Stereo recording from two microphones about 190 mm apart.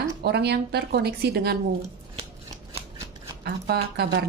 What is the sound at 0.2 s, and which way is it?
Speech, 60° right (ahead or behind).